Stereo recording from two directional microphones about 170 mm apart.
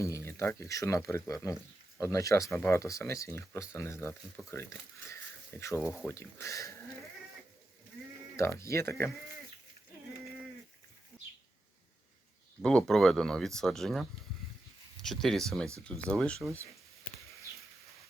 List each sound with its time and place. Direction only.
0.0 s speech: 15° left (ahead or behind)
8.4 s speech: 15° left (ahead or behind)
12.6 s speech: 5° left (ahead or behind)